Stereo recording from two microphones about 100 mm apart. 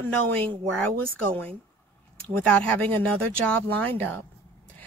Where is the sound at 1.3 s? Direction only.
10° left (ahead or behind).